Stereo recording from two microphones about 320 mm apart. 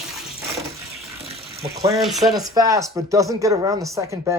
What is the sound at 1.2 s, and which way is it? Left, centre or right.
Ratchet, centre.